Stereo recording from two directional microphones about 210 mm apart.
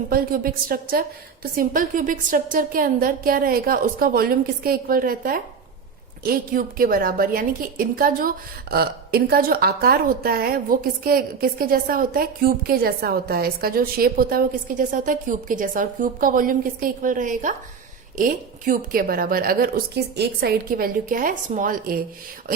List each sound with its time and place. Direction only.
0.1 s a woman's voice: 45° right (ahead or behind)